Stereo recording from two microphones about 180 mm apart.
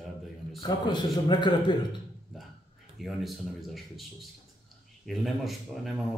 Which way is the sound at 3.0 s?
Centre (ahead or behind).